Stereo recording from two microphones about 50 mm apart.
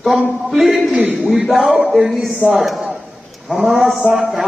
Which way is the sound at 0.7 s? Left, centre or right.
Centre.